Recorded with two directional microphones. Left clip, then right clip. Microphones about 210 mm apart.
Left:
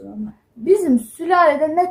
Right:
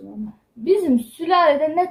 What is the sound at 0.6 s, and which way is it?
A woman's voice, 10° right (ahead or behind).